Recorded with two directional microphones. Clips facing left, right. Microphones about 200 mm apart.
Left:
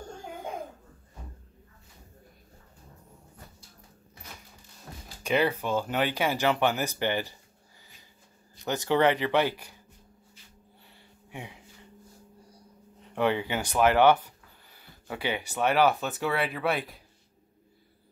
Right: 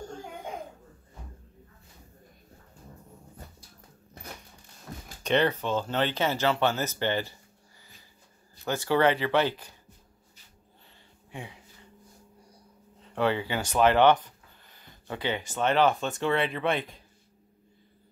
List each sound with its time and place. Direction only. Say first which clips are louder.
5.2 s speech: right 1 dB; 10° left (ahead or behind)
8.6 s speech: even; 15° left (ahead or behind)
11.2 s a sound: even; 15° left (ahead or behind)
13.1 s speech: even; 15° left (ahead or behind)